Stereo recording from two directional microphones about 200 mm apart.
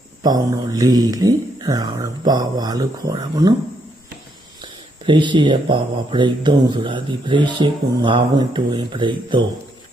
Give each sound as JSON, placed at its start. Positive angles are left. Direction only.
{"t": 0.2, "sound": "speech", "side_deg": -20}
{"t": 4.6, "sound": "speech", "side_deg": -25}